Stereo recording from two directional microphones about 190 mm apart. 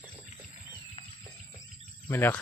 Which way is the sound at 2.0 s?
10° left (ahead or behind).